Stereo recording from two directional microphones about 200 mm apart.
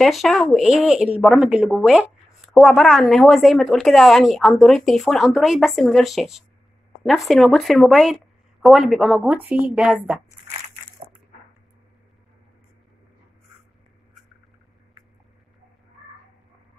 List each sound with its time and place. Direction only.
0.0 s a woman's voice: centre (ahead or behind)